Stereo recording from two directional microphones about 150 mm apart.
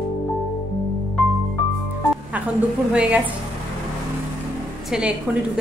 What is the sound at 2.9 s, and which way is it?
Speech, 5° right (ahead or behind).